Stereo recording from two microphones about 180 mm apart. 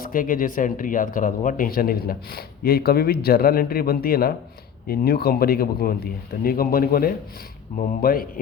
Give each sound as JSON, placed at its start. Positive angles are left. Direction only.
{"t": 0.0, "sound": "speech", "side_deg": 50}